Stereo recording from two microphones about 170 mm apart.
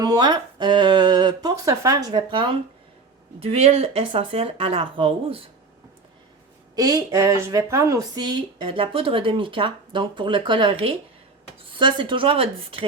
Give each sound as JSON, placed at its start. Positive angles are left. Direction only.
{"t": 0.0, "sound": "speech", "side_deg": -25}
{"t": 6.7, "sound": "speech", "side_deg": -20}